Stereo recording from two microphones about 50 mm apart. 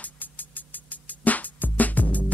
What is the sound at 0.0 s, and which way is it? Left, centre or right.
Music, left.